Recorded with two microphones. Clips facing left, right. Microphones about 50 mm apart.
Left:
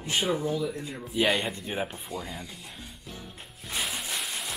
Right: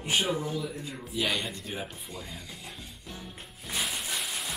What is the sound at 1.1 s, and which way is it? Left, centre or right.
Speech, centre.